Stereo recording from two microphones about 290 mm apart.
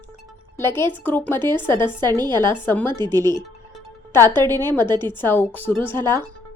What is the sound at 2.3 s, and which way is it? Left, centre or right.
Speech, centre.